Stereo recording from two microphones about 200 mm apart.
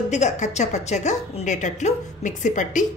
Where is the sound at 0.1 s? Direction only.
35° left (ahead or behind).